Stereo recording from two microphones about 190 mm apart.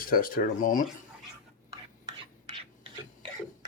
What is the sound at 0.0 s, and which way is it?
Speech, 50° left (ahead or behind).